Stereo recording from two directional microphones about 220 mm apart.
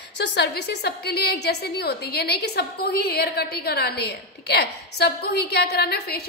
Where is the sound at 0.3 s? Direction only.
45° left (ahead or behind).